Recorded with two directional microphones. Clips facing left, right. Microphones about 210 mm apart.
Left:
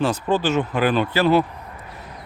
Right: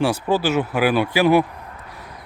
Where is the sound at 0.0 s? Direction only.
10° right (ahead or behind).